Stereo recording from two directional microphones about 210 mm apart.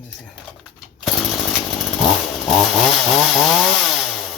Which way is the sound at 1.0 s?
Centre (ahead or behind).